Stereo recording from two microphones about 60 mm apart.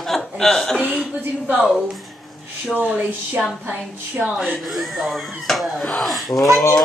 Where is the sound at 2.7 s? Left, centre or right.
Right.